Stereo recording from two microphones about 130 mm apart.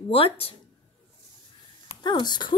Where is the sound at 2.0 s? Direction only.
35° left (ahead or behind).